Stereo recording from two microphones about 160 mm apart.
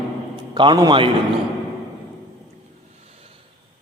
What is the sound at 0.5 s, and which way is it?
Speech, 25° right (ahead or behind).